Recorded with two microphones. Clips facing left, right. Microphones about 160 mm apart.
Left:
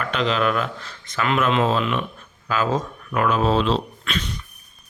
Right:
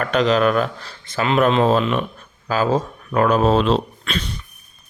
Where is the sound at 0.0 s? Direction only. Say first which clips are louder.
Right 5 dB; 45° right (ahead or behind).